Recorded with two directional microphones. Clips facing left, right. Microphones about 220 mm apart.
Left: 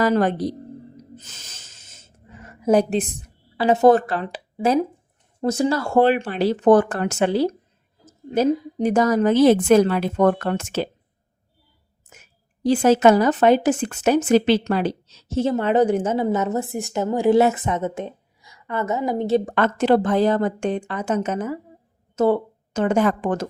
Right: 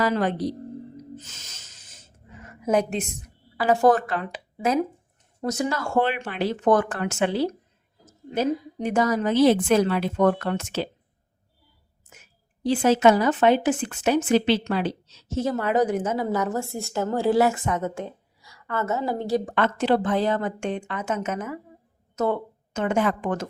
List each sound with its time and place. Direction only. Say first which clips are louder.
0.0 s a woman's voice: left 4 dB; 45° left (ahead or behind)
1.2 s snort: left 1 dB; 35° left (ahead or behind)
2.4 s a woman's voice: left 5 dB; 35° left (ahead or behind)
12.6 s a woman's voice: left 3 dB; 45° left (ahead or behind)
15.4 s a woman's voice: left 4 dB; 25° left (ahead or behind)
19.5 s a woman's voice: left 4 dB; 45° left (ahead or behind)